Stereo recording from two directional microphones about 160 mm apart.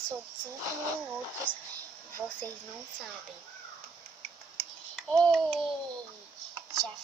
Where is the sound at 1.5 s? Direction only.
30° left (ahead or behind).